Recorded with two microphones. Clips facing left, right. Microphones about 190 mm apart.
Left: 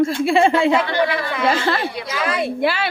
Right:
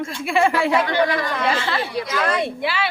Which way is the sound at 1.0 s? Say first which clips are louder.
Even; 45° right (ahead or behind).